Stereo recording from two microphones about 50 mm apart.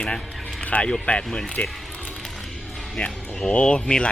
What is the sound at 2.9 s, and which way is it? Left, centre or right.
Speech, centre.